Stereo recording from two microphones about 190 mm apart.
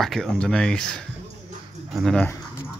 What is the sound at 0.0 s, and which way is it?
Speech, centre (ahead or behind).